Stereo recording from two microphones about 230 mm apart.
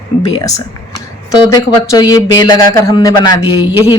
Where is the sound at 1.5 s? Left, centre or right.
Centre.